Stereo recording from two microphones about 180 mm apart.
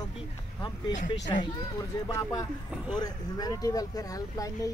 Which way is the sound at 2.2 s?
20° left (ahead or behind).